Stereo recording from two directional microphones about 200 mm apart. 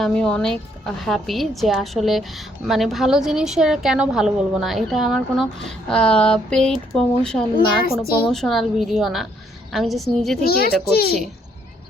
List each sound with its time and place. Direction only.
0.0 s a woman's voice: 5° left (ahead or behind)
7.5 s a woman's voice: 50° left (ahead or behind)
8.3 s a woman's voice: centre (ahead or behind)
10.4 s a woman's voice: 50° left (ahead or behind)